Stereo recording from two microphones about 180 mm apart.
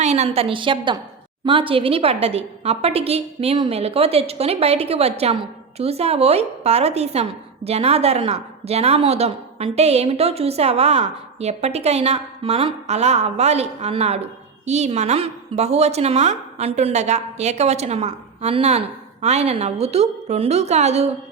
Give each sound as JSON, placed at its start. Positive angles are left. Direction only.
{"t": 0.0, "sound": "a woman's voice", "side_deg": -40}